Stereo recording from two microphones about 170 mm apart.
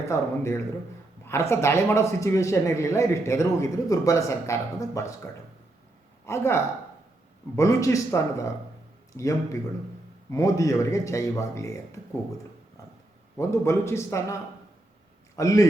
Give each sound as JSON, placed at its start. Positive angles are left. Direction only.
{"t": 0.0, "sound": "a man's voice", "side_deg": 15}
{"t": 13.3, "sound": "a man's voice", "side_deg": 15}
{"t": 15.4, "sound": "a man's voice", "side_deg": 20}